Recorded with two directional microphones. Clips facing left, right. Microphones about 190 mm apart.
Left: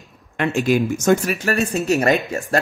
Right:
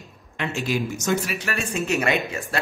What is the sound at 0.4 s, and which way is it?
Speech, 55° left (ahead or behind).